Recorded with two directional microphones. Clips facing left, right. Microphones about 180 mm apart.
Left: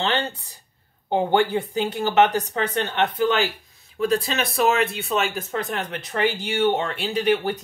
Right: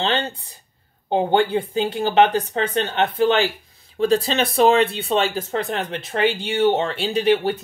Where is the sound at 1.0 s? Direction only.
20° right (ahead or behind).